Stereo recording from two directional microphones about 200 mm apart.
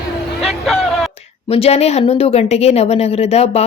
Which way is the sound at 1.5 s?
30° left (ahead or behind).